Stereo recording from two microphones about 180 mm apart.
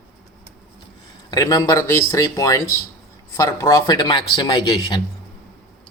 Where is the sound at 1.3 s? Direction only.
20° left (ahead or behind).